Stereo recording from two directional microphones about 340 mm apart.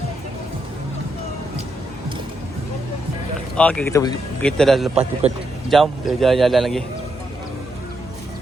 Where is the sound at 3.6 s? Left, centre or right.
Centre.